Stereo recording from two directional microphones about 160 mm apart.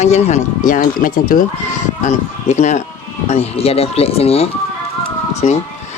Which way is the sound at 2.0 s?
50° left (ahead or behind).